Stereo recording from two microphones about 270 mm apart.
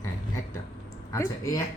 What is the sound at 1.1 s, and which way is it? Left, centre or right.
Speech, centre.